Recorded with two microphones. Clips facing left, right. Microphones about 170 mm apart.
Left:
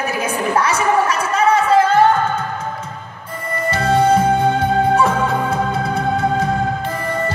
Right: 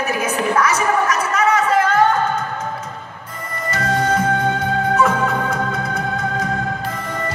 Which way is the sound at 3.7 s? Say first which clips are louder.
Left 5 dB; 30° left (ahead or behind).